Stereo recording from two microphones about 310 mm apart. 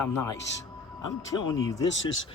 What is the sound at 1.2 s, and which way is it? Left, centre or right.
Speech, centre.